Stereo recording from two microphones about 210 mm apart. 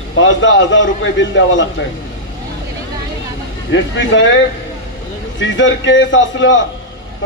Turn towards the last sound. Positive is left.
turn(degrees=60)  # may be behind; listen again after turning